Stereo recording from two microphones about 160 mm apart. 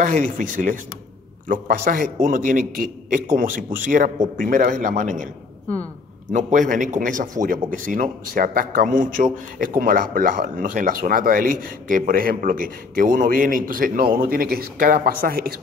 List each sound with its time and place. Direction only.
0.0 s a man's voice: 55° right (ahead or behind)
6.3 s a man's voice: 55° right (ahead or behind)